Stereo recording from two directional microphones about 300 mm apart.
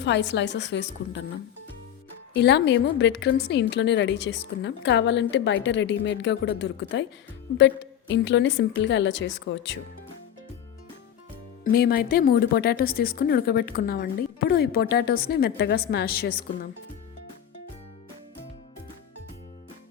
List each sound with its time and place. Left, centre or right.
0.0 s speech: left
2.3 s speech: left
11.6 s speech: left